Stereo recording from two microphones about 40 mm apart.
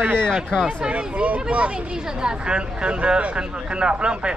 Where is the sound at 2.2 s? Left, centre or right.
Right.